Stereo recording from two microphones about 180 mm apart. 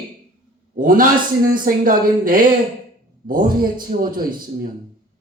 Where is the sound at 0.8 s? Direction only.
50° right (ahead or behind).